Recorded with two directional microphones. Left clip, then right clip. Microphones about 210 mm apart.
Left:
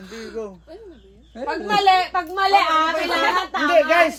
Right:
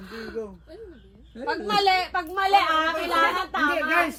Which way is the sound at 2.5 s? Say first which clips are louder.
Left 4 dB; 25° right (ahead or behind).